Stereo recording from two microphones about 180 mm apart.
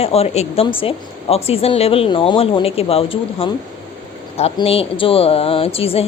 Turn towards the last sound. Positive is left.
turn(degrees=30)  # may be behind; listen again after turning